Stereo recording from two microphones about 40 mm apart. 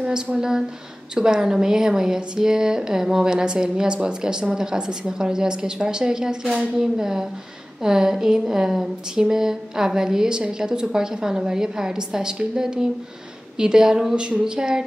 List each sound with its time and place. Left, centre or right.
0.4 s speech: centre